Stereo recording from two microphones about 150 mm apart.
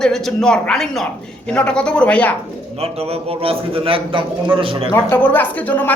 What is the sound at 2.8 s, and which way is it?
A man's voice, 40° right (ahead or behind).